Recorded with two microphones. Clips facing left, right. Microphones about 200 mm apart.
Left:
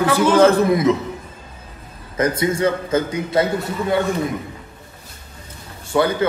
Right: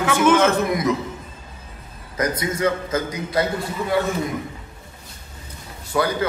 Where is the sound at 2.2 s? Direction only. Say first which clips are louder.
Left 4 dB; 30° left (ahead or behind).